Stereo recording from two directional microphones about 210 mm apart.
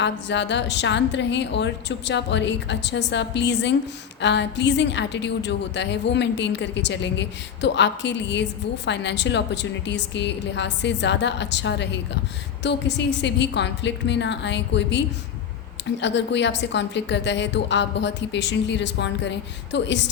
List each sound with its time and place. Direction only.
0.0 s a woman's voice: 55° left (ahead or behind)